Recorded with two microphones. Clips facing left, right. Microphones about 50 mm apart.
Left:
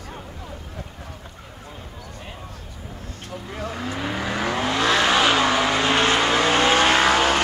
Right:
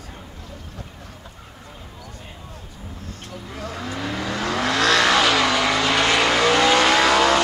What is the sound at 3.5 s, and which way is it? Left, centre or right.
Vehicle, left.